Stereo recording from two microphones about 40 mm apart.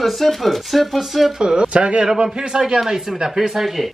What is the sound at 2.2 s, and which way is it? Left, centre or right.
Speech, centre.